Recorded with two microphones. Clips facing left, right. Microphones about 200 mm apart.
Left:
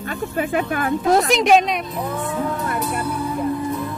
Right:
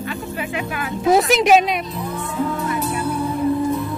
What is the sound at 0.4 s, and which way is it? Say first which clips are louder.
Speech: left 8 dB; 50° left (ahead or behind).